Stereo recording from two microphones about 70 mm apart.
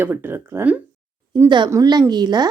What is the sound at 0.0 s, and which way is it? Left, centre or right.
Speech, right.